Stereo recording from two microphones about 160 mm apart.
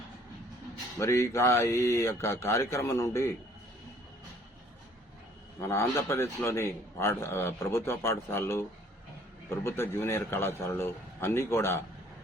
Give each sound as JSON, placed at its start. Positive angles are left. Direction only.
{"t": 0.9, "sound": "a man's voice", "side_deg": 20}
{"t": 5.5, "sound": "a man's voice", "side_deg": 15}